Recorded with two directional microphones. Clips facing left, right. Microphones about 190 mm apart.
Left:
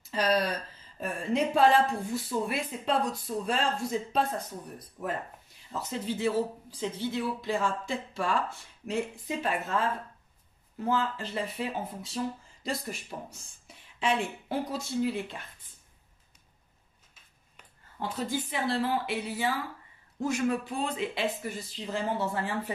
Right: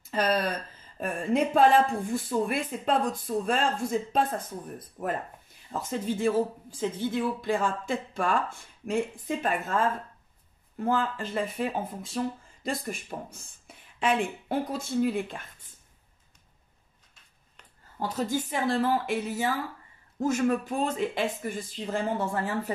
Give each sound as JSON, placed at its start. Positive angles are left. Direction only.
{"t": 0.0, "sound": "speech", "side_deg": -50}
{"t": 10.9, "sound": "speech", "side_deg": -50}
{"t": 17.9, "sound": "speech", "side_deg": -40}